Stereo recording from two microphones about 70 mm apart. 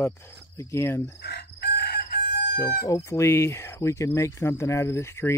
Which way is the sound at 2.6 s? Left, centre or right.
Left.